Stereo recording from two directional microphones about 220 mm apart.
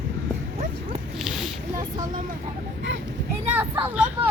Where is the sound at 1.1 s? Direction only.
Centre (ahead or behind).